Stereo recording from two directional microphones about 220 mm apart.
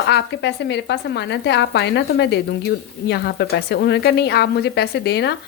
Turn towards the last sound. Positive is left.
turn(degrees=50)  # may be behind; listen again after turning